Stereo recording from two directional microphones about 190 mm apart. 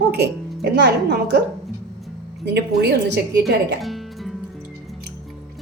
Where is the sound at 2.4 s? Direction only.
60° right (ahead or behind).